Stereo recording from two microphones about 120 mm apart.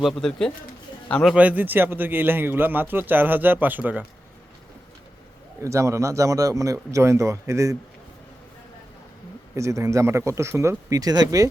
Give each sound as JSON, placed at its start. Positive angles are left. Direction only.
{"t": 0.0, "sound": "speech", "side_deg": 5}
{"t": 1.4, "sound": "speech", "side_deg": -15}
{"t": 5.6, "sound": "a man's voice", "side_deg": -25}
{"t": 9.6, "sound": "a man's voice", "side_deg": -25}